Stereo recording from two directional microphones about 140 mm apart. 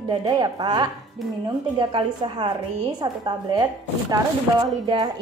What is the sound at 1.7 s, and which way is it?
Speech, 35° right (ahead or behind).